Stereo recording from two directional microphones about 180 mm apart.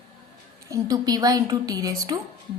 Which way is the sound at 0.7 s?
20° right (ahead or behind).